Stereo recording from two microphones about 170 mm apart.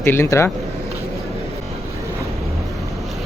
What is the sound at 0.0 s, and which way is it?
Speech, 15° left (ahead or behind).